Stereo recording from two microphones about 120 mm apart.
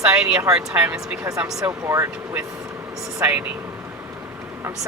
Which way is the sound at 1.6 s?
20° right (ahead or behind).